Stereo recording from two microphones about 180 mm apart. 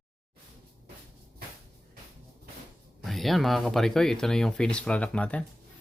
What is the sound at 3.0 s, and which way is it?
Speech, centre (ahead or behind).